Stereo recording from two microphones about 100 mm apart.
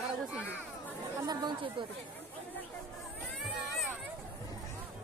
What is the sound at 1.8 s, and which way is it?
Speech, 55° right (ahead or behind).